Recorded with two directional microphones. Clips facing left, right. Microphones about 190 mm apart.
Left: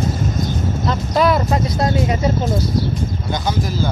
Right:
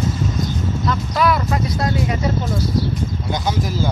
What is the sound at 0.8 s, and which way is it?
Speech, 30° left (ahead or behind).